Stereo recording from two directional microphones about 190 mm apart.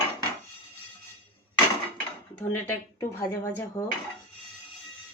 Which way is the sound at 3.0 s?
15° left (ahead or behind).